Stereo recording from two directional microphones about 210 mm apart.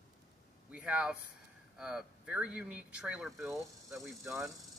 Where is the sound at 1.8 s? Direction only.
5° right (ahead or behind).